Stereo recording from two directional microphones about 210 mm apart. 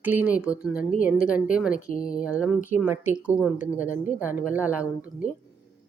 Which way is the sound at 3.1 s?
10° left (ahead or behind).